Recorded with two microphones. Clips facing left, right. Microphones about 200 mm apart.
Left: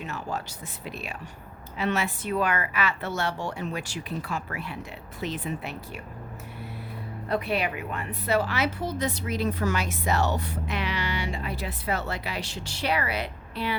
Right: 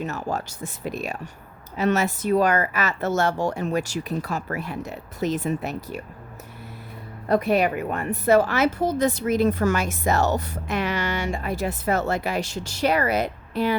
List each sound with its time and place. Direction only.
0.0 s a woman's voice: 45° right (ahead or behind)
7.3 s a woman's voice: 45° right (ahead or behind)